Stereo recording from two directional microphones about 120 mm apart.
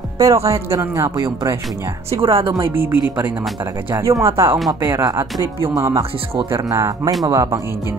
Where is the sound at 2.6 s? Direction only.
15° right (ahead or behind).